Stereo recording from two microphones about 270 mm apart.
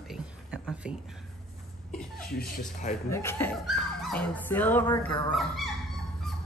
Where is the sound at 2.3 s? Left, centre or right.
Left.